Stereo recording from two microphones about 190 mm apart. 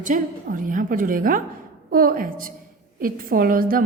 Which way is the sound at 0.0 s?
45° right (ahead or behind).